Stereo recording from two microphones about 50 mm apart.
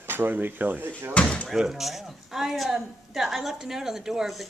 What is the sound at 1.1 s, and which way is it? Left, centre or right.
Speech, left.